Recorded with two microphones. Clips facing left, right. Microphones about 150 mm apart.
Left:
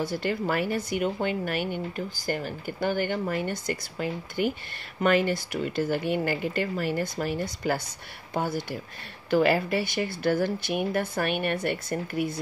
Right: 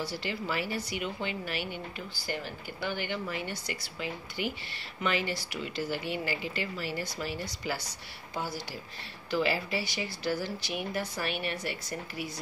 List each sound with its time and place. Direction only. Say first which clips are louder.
0.0 s speech: left 7 dB; 50° left (ahead or behind)